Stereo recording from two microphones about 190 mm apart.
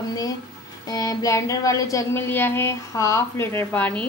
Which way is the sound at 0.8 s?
20° left (ahead or behind).